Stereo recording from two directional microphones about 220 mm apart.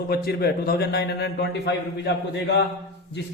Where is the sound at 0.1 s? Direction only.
45° left (ahead or behind).